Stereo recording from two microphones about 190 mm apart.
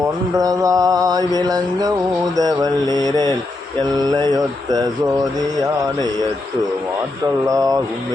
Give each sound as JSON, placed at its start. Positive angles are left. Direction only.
{"t": 0.3, "sound": "mantra", "side_deg": -15}
{"t": 7.4, "sound": "speech", "side_deg": -20}